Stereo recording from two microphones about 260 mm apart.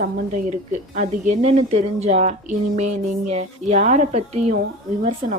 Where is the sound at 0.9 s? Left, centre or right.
Right.